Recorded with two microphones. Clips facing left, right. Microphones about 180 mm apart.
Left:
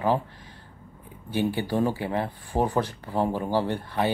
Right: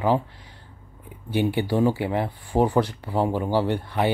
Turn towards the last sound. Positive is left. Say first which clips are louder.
# right 3 dB
turn(degrees=-20)  # may be behind; listen again after turning